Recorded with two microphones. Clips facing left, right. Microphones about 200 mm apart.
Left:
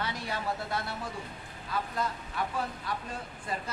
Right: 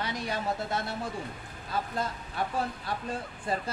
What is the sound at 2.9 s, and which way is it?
Speech, 30° right (ahead or behind).